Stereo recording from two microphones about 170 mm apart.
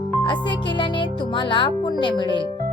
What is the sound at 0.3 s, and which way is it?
Speech, 30° left (ahead or behind).